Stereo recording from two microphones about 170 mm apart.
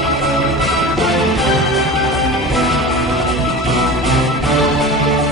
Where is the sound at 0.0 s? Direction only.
Centre (ahead or behind).